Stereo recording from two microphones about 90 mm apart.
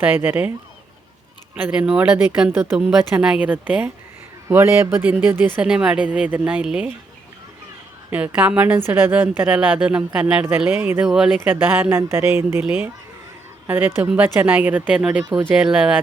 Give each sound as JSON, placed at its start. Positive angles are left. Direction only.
{"t": 0.0, "sound": "speech", "side_deg": -20}
{"t": 2.0, "sound": "a woman's voice", "side_deg": -10}
{"t": 5.6, "sound": "a woman's voice", "side_deg": -10}
{"t": 8.1, "sound": "a woman's voice", "side_deg": -15}
{"t": 10.8, "sound": "speech", "side_deg": -20}
{"t": 11.0, "sound": "a woman's voice", "side_deg": -5}
{"t": 11.3, "sound": "a woman's voice", "side_deg": -20}